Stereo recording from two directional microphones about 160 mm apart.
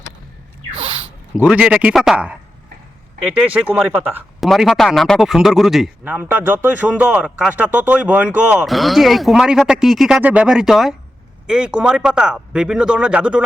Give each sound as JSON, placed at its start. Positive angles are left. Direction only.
{"t": 0.8, "sound": "a sound", "side_deg": -30}
{"t": 1.4, "sound": "a man's voice", "side_deg": -5}
{"t": 4.4, "sound": "a man's voice", "side_deg": 0}